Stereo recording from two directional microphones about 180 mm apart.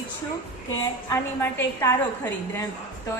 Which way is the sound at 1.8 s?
15° left (ahead or behind).